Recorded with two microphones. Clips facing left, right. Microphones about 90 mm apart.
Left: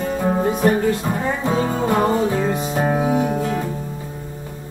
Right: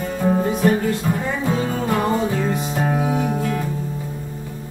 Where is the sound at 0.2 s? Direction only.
25° left (ahead or behind).